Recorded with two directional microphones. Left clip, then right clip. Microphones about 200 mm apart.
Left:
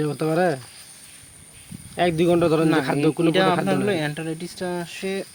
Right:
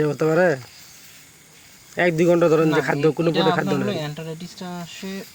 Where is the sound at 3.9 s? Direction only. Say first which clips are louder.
Left 3 dB; 50° left (ahead or behind).